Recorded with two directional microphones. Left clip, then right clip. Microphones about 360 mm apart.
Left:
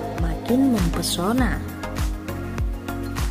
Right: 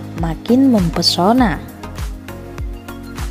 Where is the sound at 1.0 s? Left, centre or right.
Centre.